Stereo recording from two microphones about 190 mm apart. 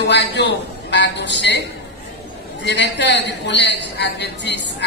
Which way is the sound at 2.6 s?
65° left (ahead or behind).